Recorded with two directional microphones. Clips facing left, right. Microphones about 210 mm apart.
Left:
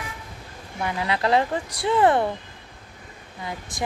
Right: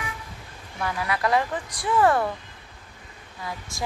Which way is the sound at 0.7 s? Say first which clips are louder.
Left 2 dB; 20° left (ahead or behind).